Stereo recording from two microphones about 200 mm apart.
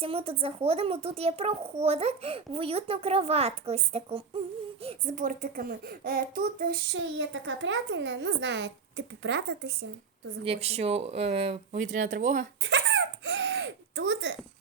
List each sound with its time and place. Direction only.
0.0 s a child's voice: 30° right (ahead or behind); by 6.8 s 45° right (ahead or behind)
6.9 s a child's voice: 70° right (ahead or behind)
10.4 s speech: 30° right (ahead or behind)
12.6 s a sound: 65° right (ahead or behind)